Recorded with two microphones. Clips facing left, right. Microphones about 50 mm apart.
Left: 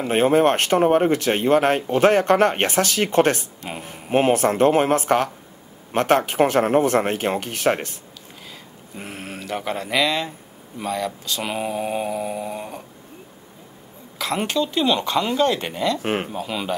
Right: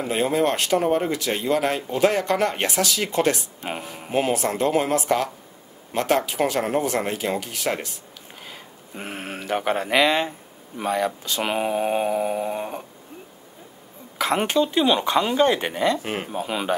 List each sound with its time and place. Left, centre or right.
0.1 s speech: left
8.5 s a sound: centre
10.8 s mantra: centre
14.1 s mantra: centre
16.0 s speech: left
16.3 s mantra: centre